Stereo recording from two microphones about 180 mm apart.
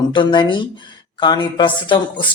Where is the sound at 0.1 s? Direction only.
25° left (ahead or behind).